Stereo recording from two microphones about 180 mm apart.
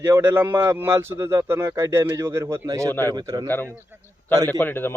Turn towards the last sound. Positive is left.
turn(degrees=10)  # may be behind; listen again after turning